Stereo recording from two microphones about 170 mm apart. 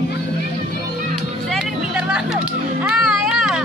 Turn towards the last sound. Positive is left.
turn(degrees=-5)  # may be behind; listen again after turning